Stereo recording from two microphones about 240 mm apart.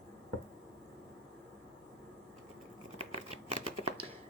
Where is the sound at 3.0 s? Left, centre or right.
Right.